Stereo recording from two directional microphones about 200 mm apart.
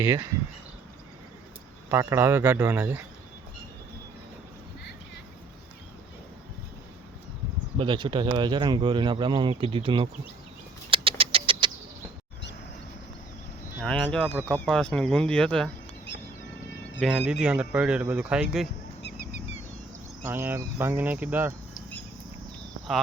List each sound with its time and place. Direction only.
0.0 s speech: 15° right (ahead or behind)
1.9 s speech: 10° right (ahead or behind)
7.8 s speech: 25° right (ahead or behind)
10.9 s bird: 25° right (ahead or behind)
13.8 s speech: 5° left (ahead or behind)
17.0 s speech: 5° right (ahead or behind)
20.2 s speech: 10° right (ahead or behind)